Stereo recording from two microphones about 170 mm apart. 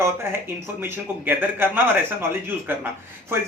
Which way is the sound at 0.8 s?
10° right (ahead or behind).